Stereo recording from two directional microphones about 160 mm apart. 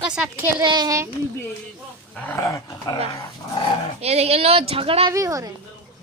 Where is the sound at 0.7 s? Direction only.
25° right (ahead or behind).